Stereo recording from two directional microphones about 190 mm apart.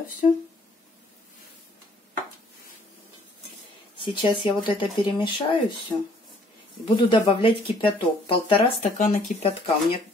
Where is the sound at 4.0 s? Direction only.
25° left (ahead or behind).